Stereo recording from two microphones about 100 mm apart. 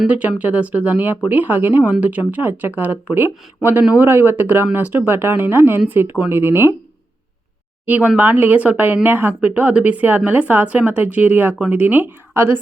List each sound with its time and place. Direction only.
0.0 s speech: 10° right (ahead or behind)
7.9 s speech: 15° right (ahead or behind)